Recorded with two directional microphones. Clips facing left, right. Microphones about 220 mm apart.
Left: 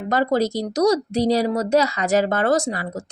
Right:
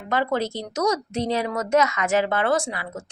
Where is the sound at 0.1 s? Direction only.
40° left (ahead or behind).